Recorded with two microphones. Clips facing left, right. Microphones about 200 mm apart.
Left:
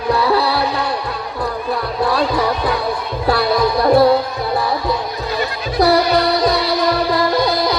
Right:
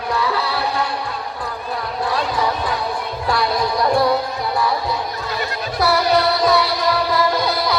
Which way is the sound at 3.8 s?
35° left (ahead or behind).